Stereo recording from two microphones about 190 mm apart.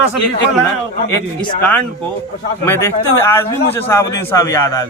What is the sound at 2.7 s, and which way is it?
A man's voice, 15° left (ahead or behind).